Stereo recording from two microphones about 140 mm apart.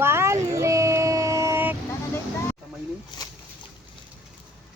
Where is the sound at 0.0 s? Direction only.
20° right (ahead or behind).